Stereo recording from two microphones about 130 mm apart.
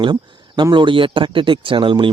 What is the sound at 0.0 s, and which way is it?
Speech, 35° right (ahead or behind).